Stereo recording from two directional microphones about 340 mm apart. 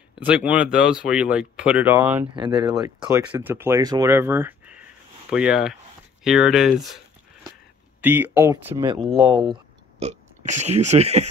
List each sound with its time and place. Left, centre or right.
0.2 s speech: centre
8.0 s speech: centre